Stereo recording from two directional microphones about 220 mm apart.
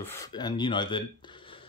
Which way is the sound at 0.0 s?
15° left (ahead or behind).